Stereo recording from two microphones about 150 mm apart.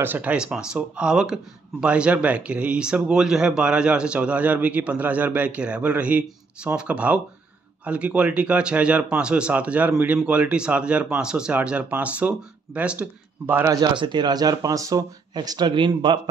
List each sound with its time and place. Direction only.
0.0 s speech: 10° right (ahead or behind)
13.7 s speech: 30° right (ahead or behind)